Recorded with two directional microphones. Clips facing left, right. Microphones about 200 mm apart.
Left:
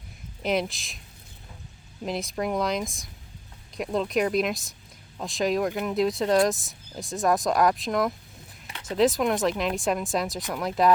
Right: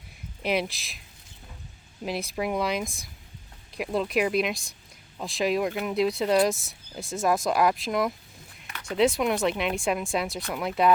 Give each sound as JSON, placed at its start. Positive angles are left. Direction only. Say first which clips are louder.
{"t": 0.4, "sound": "speech", "louder": "left 1 dB", "side_deg": -5}
{"t": 2.0, "sound": "speech", "louder": "left 1 dB", "side_deg": -5}
{"t": 8.6, "sound": "a sound", "louder": "left 1 dB", "side_deg": 25}
{"t": 9.0, "sound": "speech", "louder": "left 1 dB", "side_deg": 0}